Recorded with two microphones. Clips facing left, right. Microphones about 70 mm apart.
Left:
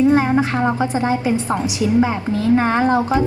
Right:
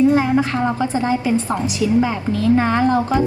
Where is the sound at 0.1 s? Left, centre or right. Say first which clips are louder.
Left 1 dB; left.